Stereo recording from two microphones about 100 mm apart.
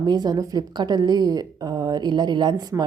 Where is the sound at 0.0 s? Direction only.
45° right (ahead or behind).